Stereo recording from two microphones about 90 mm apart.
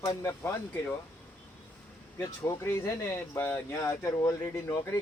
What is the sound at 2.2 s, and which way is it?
Speech, 40° left (ahead or behind).